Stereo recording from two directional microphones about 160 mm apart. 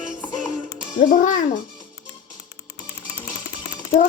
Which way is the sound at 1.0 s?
55° left (ahead or behind).